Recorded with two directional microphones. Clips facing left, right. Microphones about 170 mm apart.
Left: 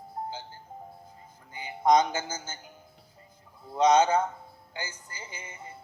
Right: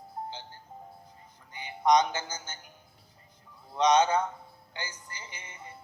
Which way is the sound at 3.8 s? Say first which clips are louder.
Left 2 dB; 25° left (ahead or behind).